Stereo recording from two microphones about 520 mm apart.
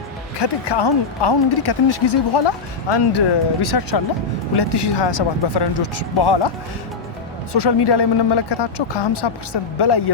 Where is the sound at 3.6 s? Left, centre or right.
Left.